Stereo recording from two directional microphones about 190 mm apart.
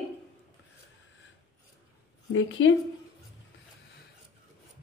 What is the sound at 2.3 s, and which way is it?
Speech, 90° left.